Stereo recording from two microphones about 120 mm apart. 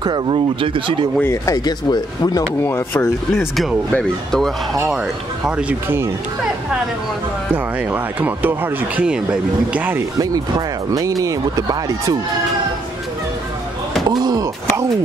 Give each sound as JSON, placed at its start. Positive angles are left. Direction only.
{"t": 0.0, "sound": "speech", "side_deg": -40}
{"t": 1.2, "sound": "speech", "side_deg": 25}
{"t": 2.6, "sound": "speech", "side_deg": 20}
{"t": 3.9, "sound": "speech", "side_deg": 5}
{"t": 5.6, "sound": "speech", "side_deg": -15}
{"t": 7.5, "sound": "speech", "side_deg": -15}
{"t": 10.9, "sound": "speech", "side_deg": -30}
{"t": 14.0, "sound": "a sound", "side_deg": -35}